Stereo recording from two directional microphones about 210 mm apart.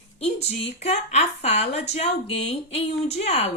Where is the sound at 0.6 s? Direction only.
30° left (ahead or behind).